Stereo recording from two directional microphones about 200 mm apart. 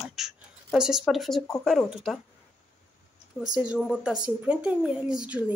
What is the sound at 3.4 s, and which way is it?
Speech, 5° right (ahead or behind).